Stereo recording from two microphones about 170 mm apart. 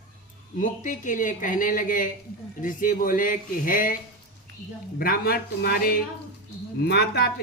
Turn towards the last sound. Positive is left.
turn(degrees=70)  # may be behind; listen again after turning